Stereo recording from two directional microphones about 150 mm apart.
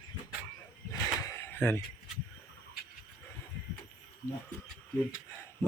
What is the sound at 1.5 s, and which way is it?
Speech, 15° left (ahead or behind).